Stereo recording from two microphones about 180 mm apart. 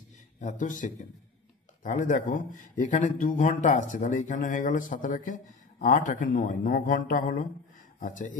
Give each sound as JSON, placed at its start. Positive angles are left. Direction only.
{"t": 0.4, "sound": "speech", "side_deg": 45}